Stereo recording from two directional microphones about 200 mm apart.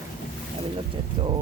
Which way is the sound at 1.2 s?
25° right (ahead or behind).